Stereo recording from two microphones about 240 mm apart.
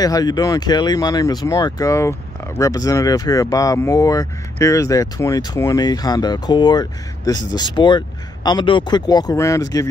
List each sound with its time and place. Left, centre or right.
0.0 s speech: centre